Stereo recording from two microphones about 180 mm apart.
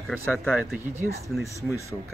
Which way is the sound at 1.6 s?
15° right (ahead or behind).